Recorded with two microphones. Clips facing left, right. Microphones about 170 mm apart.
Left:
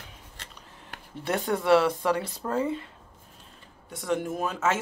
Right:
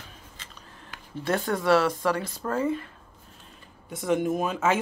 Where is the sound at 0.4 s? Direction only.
70° left (ahead or behind).